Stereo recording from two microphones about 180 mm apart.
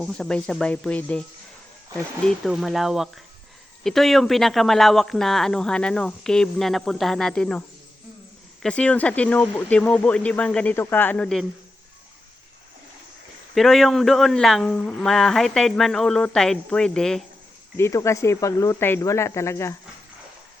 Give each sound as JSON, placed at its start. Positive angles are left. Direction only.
{"t": 0.0, "sound": "a man's voice", "side_deg": 5}
{"t": 2.2, "sound": "a man's voice", "side_deg": 0}
{"t": 8.6, "sound": "speech", "side_deg": 5}
{"t": 13.5, "sound": "a man's voice", "side_deg": 0}
{"t": 17.7, "sound": "speech", "side_deg": 15}